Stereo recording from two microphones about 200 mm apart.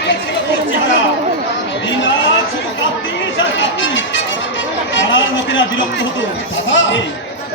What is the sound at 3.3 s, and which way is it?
Chatter, 65° left (ahead or behind).